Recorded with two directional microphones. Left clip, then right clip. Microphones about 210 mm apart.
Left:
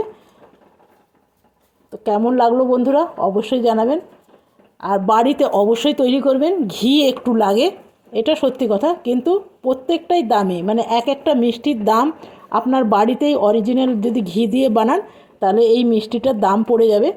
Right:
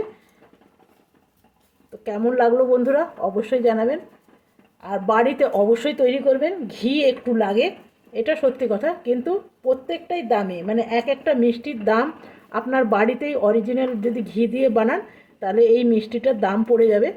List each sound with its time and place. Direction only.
1.9 s speech: 30° left (ahead or behind)